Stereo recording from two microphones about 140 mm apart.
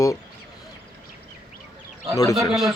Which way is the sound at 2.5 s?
Centre (ahead or behind).